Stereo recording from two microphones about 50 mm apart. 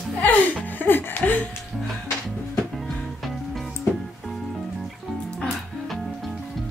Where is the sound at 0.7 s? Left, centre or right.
Left.